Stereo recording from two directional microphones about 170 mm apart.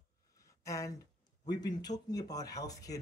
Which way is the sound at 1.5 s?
25° left (ahead or behind).